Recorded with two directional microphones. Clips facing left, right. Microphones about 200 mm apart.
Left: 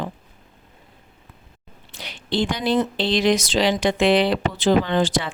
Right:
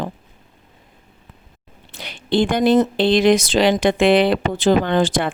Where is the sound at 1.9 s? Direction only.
55° right (ahead or behind).